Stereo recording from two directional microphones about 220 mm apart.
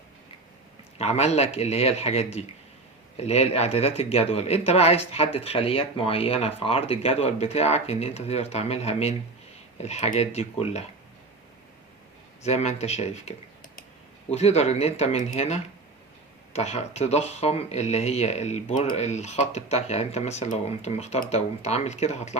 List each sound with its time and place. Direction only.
0.9 s speech: 30° left (ahead or behind)
12.4 s speech: 30° left (ahead or behind)